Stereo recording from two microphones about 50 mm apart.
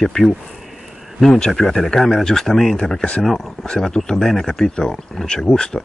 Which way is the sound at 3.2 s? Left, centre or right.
Centre.